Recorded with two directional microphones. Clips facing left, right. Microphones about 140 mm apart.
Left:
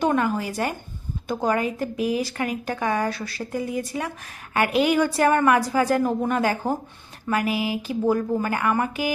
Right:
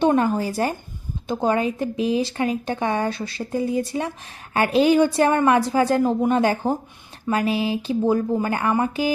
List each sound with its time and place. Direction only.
0.0 s speech: 30° right (ahead or behind)